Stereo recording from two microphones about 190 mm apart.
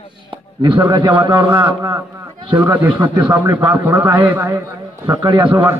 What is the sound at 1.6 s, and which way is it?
A man's voice, 15° right (ahead or behind).